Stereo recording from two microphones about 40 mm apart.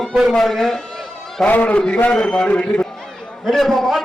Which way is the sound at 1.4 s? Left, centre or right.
Left.